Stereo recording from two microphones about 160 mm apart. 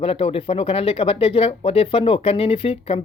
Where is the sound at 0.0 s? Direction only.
35° left (ahead or behind).